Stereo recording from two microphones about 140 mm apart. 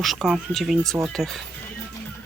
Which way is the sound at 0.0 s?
Centre (ahead or behind).